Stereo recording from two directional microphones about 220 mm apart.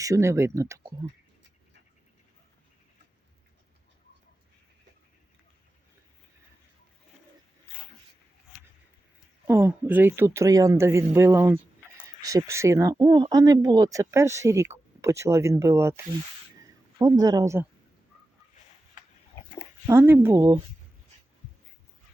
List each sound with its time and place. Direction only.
0.0 s speech: 15° right (ahead or behind)
9.5 s speech: 10° right (ahead or behind)
19.9 s speech: 10° right (ahead or behind)